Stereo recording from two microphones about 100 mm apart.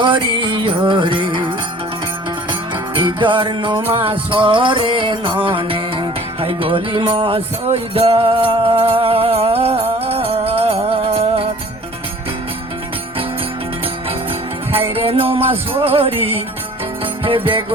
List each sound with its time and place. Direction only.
0.0 s music: 55° right (ahead or behind); by 11.4 s 80° right
14.7 s music: 75° right (ahead or behind)
17.2 s music: 60° right (ahead or behind)